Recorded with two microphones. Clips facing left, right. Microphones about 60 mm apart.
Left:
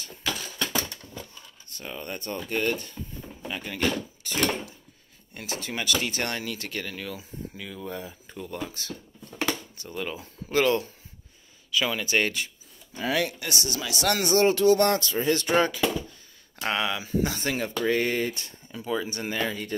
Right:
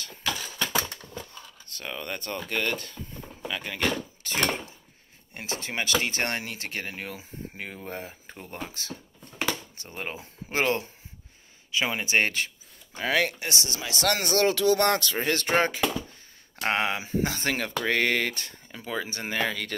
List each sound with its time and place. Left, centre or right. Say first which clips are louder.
0.4 s a sound: right 1 dB; centre
1.8 s speech: right 1 dB; right
3.6 s speech: left 2 dB; right
12.9 s speech: right 1 dB; right
13.7 s speech: left 1 dB; right
14.4 s music: left 2 dB; right
15.1 s speech: left 2 dB; right
18.8 s speech: left 3 dB; right